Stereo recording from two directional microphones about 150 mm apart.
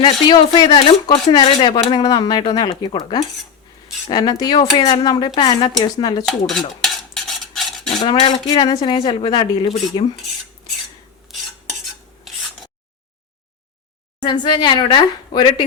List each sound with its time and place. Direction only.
0.0 s speech: 30° left (ahead or behind)
4.1 s speech: 30° left (ahead or behind)
6.5 s stir: centre (ahead or behind)
8.0 s a woman's voice: 35° left (ahead or behind)
11.3 s stir: centre (ahead or behind)
14.2 s speech: 30° left (ahead or behind)